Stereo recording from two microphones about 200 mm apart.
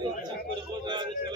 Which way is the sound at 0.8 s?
20° right (ahead or behind).